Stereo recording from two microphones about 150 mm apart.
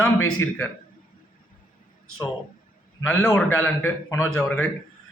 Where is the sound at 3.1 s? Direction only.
5° left (ahead or behind).